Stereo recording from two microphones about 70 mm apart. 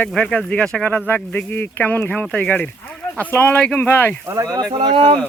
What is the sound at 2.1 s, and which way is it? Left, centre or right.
Speech, centre.